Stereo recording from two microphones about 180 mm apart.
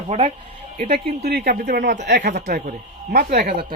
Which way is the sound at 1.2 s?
55° right (ahead or behind).